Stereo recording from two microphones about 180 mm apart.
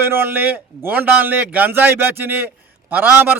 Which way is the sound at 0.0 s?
10° right (ahead or behind).